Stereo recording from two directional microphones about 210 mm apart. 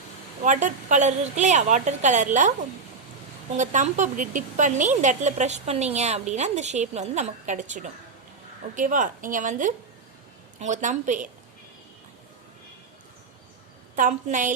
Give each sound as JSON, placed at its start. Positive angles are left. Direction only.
{"t": 0.4, "sound": "speech", "side_deg": -35}
{"t": 3.6, "sound": "speech", "side_deg": -35}
{"t": 13.9, "sound": "speech", "side_deg": -40}